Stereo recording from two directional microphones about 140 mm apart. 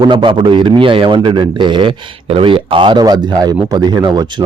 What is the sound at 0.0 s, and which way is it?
A man's voice, 35° right (ahead or behind).